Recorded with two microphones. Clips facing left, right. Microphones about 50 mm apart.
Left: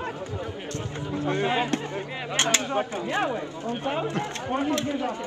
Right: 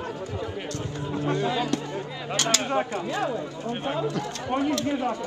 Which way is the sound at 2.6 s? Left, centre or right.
Right.